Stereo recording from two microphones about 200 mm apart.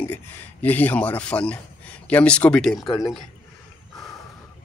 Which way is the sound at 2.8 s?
20° left (ahead or behind).